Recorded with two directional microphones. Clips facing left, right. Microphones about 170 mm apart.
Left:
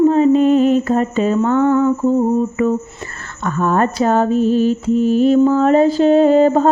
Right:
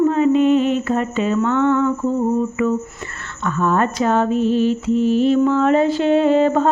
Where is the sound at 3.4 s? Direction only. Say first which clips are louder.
Left 2 dB; 45° left (ahead or behind).